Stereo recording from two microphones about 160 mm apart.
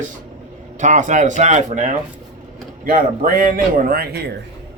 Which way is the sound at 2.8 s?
60° right (ahead or behind).